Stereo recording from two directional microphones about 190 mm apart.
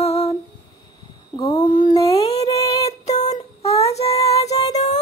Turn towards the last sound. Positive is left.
turn(degrees=35)  # may be behind; listen again after turning